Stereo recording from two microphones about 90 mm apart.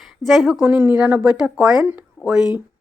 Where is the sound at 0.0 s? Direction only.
Centre (ahead or behind).